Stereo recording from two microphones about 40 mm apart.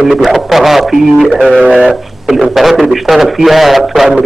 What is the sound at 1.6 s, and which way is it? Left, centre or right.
Speech, centre.